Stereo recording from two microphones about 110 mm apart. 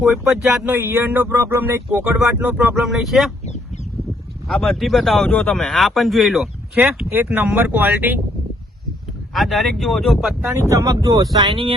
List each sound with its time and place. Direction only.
0.0 s speech: 5° right (ahead or behind)
0.7 s speech: 20° right (ahead or behind)
3.0 s speech: centre (ahead or behind)
4.4 s speech: 5° left (ahead or behind)
6.7 s speech: 20° right (ahead or behind)
9.3 s speech: centre (ahead or behind)
10.4 s speech: 25° right (ahead or behind)